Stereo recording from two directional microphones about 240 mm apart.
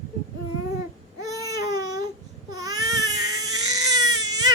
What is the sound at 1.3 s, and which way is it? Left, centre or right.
Baby cry, centre.